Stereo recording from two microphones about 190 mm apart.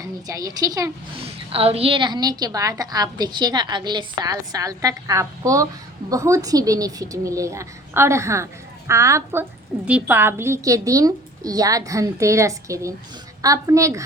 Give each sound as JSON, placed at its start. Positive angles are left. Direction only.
{"t": 0.0, "sound": "a woman's voice", "side_deg": -20}
{"t": 1.2, "sound": "a woman's voice", "side_deg": -30}